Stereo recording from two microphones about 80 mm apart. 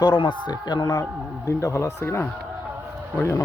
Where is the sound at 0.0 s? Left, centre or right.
Left.